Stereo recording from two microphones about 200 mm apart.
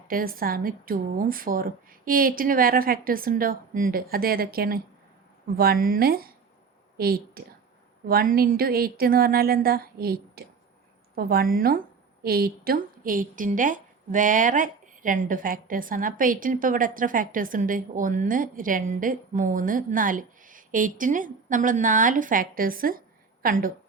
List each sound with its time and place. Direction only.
0.1 s a woman's voice: 45° right (ahead or behind)